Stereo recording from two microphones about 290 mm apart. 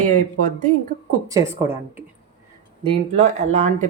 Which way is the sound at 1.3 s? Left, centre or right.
Centre.